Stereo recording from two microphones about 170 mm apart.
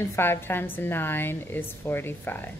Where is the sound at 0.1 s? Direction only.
15° left (ahead or behind).